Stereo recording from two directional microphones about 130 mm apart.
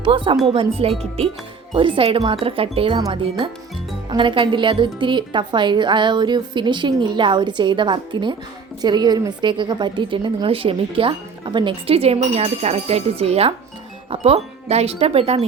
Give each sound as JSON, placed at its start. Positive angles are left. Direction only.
{"t": 0.0, "sound": "a woman's voice", "side_deg": -40}